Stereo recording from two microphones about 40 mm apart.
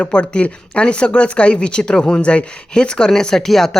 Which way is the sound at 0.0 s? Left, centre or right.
Left.